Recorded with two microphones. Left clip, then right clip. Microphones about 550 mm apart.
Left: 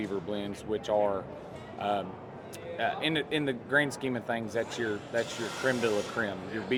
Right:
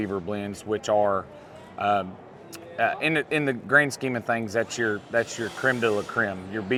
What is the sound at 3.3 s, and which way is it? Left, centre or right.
Speech, right.